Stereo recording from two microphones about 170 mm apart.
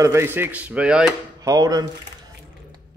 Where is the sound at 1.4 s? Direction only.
20° right (ahead or behind).